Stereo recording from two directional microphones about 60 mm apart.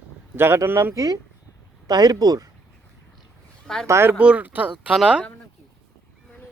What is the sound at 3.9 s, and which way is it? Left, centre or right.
Speech, right.